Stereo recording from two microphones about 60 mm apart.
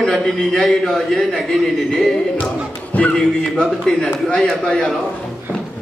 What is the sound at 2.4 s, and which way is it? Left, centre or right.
Music, left.